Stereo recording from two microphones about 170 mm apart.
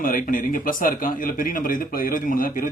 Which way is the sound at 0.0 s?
55° left (ahead or behind).